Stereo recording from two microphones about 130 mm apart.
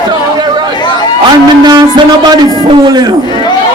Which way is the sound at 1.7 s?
30° right (ahead or behind).